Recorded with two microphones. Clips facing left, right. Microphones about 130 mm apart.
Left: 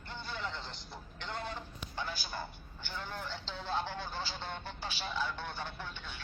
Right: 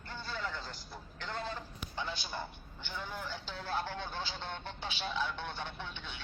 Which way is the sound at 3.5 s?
10° left (ahead or behind).